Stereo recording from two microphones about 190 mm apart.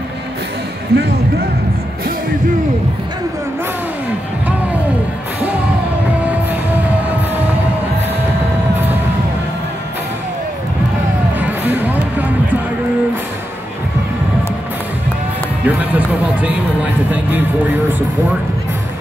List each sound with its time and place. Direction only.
0.9 s speech: 60° right (ahead or behind)
11.3 s music: 10° right (ahead or behind)
15.6 s speech: 10° right (ahead or behind)